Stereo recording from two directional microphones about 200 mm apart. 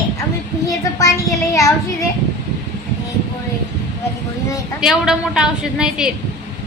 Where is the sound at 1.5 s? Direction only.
15° left (ahead or behind).